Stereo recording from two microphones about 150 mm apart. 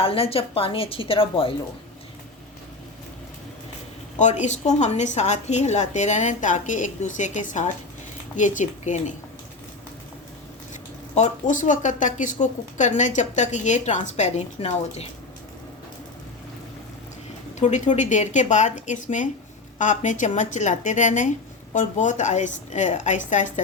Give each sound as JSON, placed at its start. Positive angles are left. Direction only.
{"t": 0.0, "sound": "a woman's voice", "side_deg": 40}
{"t": 4.2, "sound": "a woman's voice", "side_deg": 55}
{"t": 11.1, "sound": "speech", "side_deg": 55}
{"t": 17.6, "sound": "a woman's voice", "side_deg": 55}